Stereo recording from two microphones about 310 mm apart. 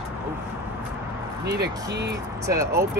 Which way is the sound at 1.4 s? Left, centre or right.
Right.